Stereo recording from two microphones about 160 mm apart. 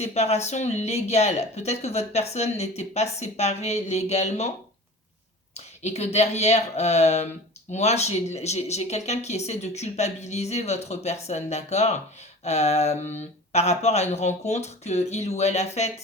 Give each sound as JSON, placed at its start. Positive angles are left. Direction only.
{"t": 0.0, "sound": "speech", "side_deg": 45}
{"t": 5.5, "sound": "speech", "side_deg": 45}